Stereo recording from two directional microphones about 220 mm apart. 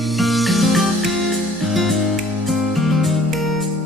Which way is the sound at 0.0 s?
Centre (ahead or behind).